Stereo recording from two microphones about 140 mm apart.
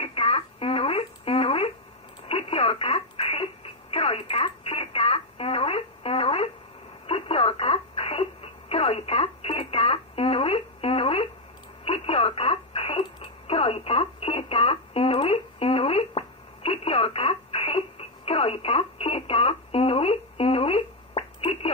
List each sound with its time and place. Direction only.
0.0 s a sound: 45° left (ahead or behind)
2.2 s telephone: 45° left (ahead or behind)
7.1 s radio: 45° left (ahead or behind)